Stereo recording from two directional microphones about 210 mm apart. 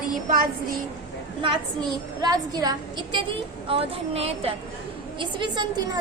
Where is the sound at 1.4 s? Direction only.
20° right (ahead or behind).